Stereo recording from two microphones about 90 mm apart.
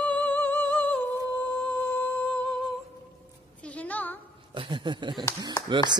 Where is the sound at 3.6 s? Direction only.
15° left (ahead or behind).